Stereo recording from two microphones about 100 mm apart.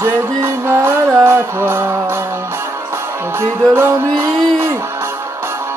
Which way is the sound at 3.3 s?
25° right (ahead or behind).